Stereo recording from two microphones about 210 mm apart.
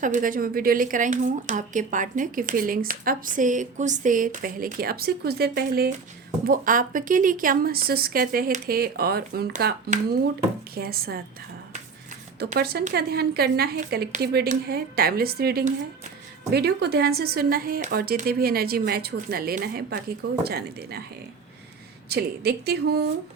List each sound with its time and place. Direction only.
0.0 s a woman's voice: 40° right (ahead or behind)
12.5 s speech: 50° right (ahead or behind)
22.1 s speech: 50° right (ahead or behind)